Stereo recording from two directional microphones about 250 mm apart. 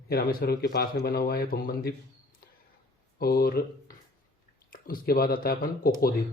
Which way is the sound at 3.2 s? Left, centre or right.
Left.